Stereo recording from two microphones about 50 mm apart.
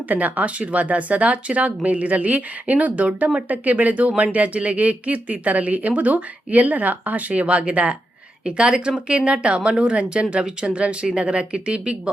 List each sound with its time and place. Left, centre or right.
0.1 s speech: right